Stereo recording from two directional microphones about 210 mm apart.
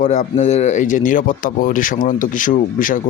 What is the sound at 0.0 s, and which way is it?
Speech, 35° left (ahead or behind).